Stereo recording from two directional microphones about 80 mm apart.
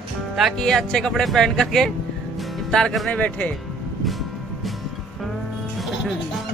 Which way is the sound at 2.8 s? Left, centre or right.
Centre.